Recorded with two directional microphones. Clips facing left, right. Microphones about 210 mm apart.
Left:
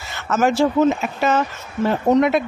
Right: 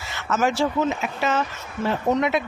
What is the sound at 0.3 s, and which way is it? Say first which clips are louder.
Speech: left 5 dB; 50° left (ahead or behind).